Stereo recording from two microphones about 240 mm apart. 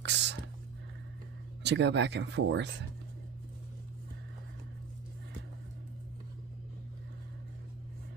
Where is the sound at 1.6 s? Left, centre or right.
Right.